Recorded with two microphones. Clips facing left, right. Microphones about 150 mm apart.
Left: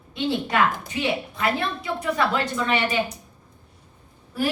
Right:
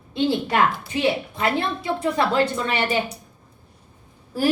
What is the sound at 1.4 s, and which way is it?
A woman's voice, 30° right (ahead or behind).